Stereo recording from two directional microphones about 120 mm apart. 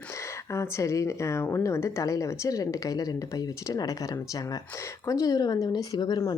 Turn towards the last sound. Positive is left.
turn(degrees=35)  # may be behind; listen again after turning